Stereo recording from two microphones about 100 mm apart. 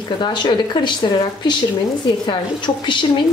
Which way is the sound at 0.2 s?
50° left (ahead or behind).